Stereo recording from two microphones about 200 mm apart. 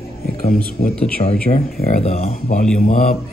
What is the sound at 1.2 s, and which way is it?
Mantra, 30° left (ahead or behind).